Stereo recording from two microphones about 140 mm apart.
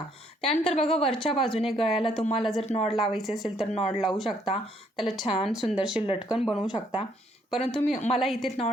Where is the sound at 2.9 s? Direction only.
Centre (ahead or behind).